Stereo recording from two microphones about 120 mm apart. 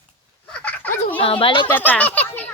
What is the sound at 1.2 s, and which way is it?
Speech, 45° left (ahead or behind).